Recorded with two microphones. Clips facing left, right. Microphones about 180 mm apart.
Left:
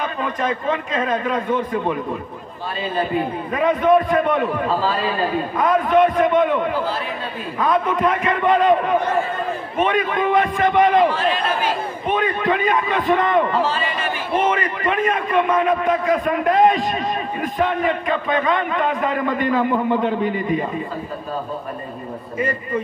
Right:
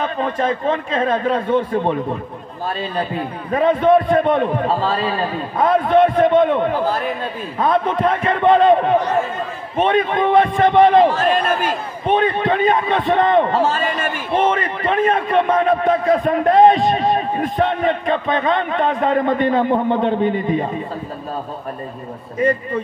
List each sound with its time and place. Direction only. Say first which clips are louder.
0.0 s a man's voice: right 3 dB; 30° right (ahead or behind)
3.5 s a man's voice: right 2 dB; 30° right (ahead or behind)
5.6 s a man's voice: right 2 dB; 30° right (ahead or behind)
6.7 s speech: right 3 dB; 45° right (ahead or behind)
7.5 s a man's voice: right 2 dB; 30° right (ahead or behind)
11.1 s speech: right 3 dB; 45° right (ahead or behind)
12.1 s a man's voice: right 3 dB; 30° right (ahead or behind)
13.5 s a man's voice: right 3 dB; 45° right (ahead or behind)
14.4 s a man's voice: right 3 dB; 30° right (ahead or behind)